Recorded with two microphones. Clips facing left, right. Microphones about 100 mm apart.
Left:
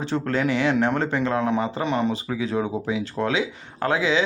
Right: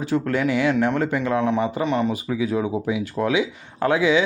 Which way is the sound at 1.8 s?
Centre (ahead or behind).